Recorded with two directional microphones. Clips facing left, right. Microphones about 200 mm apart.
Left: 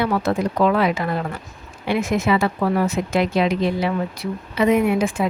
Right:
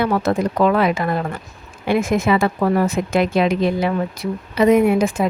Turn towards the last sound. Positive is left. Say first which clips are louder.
# right 3 dB
turn(degrees=-40)  # may be behind; listen again after turning